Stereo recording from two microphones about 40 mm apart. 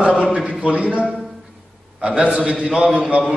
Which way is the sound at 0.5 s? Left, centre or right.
Right.